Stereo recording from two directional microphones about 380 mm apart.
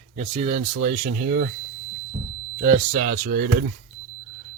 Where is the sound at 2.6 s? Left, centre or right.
Centre.